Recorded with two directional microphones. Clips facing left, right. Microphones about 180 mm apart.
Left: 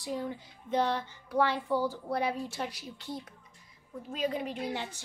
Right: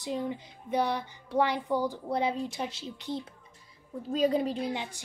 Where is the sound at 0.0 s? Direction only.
20° right (ahead or behind).